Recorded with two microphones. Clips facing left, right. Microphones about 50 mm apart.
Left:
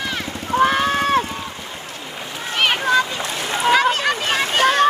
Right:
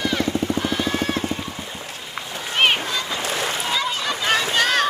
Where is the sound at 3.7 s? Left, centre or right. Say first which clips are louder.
Left 7 dB; left.